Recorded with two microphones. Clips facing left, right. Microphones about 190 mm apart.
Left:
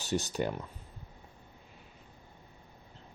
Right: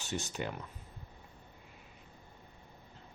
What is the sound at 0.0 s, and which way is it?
Speech, 35° left (ahead or behind).